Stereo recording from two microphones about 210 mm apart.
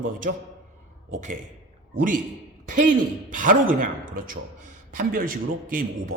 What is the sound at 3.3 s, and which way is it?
Speech, 40° right (ahead or behind).